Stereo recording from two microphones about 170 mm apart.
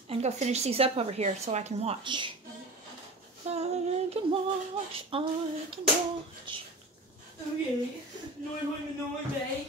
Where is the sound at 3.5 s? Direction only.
40° right (ahead or behind).